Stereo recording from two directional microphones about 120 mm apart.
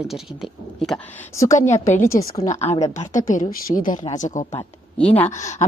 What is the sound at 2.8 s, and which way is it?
A woman's voice, 85° left.